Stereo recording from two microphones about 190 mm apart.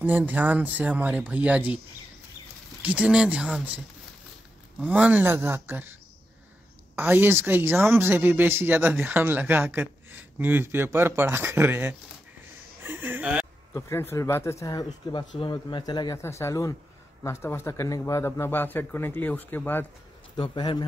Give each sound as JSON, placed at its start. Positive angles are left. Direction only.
{"t": 0.0, "sound": "speech", "side_deg": -10}
{"t": 2.8, "sound": "speech", "side_deg": -5}
{"t": 7.0, "sound": "speech", "side_deg": -10}
{"t": 12.8, "sound": "a sound", "side_deg": -10}
{"t": 13.7, "sound": "speech", "side_deg": 15}
{"t": 20.3, "sound": "speech", "side_deg": 25}